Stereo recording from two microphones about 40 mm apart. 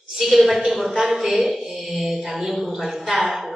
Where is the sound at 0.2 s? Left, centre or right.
Centre.